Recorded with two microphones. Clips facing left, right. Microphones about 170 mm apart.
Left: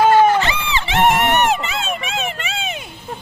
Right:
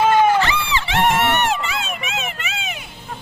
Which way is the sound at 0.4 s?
20° left (ahead or behind).